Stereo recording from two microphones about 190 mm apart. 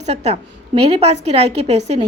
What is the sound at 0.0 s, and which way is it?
A woman's voice, 35° right (ahead or behind).